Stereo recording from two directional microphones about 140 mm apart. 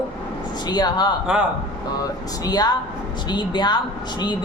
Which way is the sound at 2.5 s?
30° left (ahead or behind).